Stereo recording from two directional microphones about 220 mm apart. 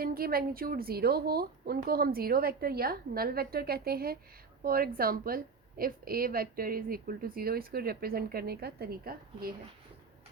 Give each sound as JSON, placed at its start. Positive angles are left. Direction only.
{"t": 0.0, "sound": "a woman's voice", "side_deg": -40}